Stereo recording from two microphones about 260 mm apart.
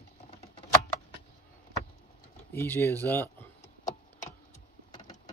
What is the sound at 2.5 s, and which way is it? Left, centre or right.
Speech, centre.